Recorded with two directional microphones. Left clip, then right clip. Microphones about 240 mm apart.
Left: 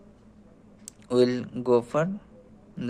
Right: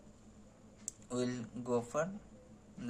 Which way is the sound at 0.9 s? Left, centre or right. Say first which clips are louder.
Left 16 dB; left.